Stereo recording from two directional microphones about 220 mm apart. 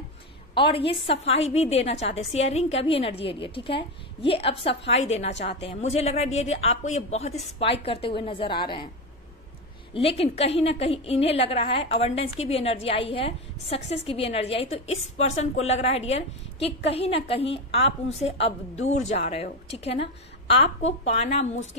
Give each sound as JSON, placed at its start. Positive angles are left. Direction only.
{"t": 0.6, "sound": "a woman's voice", "side_deg": 25}
{"t": 9.9, "sound": "a woman's voice", "side_deg": 25}